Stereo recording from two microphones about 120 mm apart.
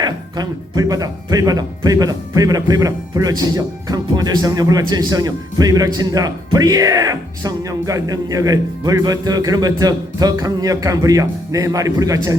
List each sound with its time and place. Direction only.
0.0 s speech: 35° right (ahead or behind)